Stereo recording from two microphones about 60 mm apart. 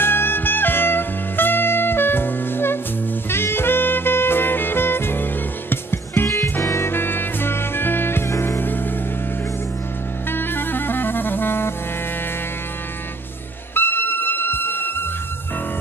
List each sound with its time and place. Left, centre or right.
0.0 s music: left
3.3 s saxophone: left
6.6 s music: left
10.3 s music: left
13.7 s music: left